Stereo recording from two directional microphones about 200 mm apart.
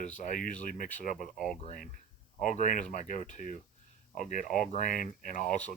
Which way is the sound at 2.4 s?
40° left (ahead or behind).